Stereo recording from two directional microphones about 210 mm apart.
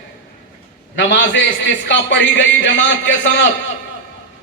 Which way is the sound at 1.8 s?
60° left (ahead or behind).